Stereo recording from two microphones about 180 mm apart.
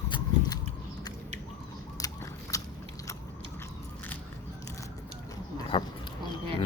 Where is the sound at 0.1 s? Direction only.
20° left (ahead or behind).